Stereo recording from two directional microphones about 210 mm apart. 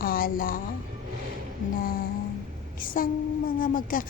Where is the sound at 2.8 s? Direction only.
40° left (ahead or behind).